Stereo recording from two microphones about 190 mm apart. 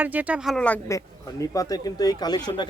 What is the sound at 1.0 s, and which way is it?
Speech, 20° left (ahead or behind).